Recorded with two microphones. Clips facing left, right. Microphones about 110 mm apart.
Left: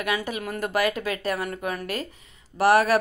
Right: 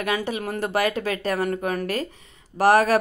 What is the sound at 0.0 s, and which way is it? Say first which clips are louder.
Speech: right 2 dB; 35° right (ahead or behind).